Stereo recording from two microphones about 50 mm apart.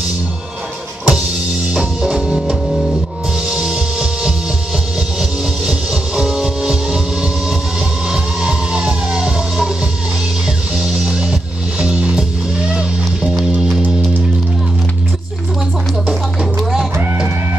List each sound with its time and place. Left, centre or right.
1.0 s music: centre
5.7 s music: centre
8.1 s music: centre
10.8 s music: centre